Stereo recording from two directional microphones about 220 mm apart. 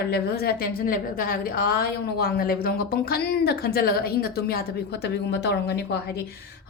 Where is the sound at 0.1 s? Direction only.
45° left (ahead or behind).